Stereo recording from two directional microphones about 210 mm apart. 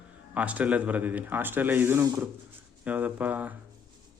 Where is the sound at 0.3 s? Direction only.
5° right (ahead or behind).